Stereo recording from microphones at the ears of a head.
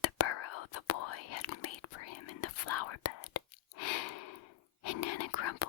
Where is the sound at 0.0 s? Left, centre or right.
Left.